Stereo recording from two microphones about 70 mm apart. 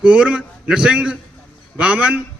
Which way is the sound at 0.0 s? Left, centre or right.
Centre.